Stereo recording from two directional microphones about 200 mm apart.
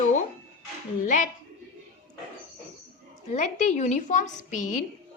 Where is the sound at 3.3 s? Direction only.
35° left (ahead or behind).